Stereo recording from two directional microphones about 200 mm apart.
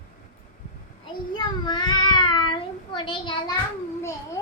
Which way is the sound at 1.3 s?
20° left (ahead or behind).